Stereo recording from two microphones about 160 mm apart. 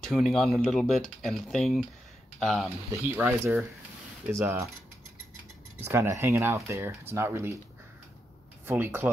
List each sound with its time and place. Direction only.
0.0 s speech: centre (ahead or behind)
2.9 s speech: 15° right (ahead or behind)
5.9 s speech: 20° right (ahead or behind)
8.6 s speech: 15° right (ahead or behind)